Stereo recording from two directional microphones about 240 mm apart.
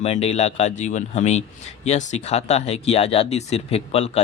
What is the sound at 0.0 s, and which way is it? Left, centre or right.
A man's voice, left.